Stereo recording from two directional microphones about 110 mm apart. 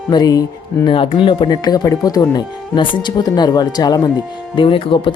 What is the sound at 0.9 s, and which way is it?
Speech, 50° left (ahead or behind).